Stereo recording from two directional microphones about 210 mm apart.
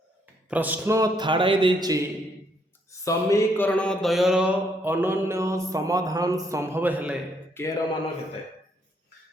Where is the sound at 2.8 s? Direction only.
15° left (ahead or behind); by 7.2 s 5° right (ahead or behind).